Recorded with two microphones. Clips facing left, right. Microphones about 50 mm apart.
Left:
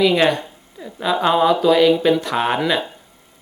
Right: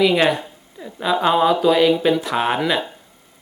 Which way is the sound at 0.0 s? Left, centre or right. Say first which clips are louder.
Left 1 dB; centre.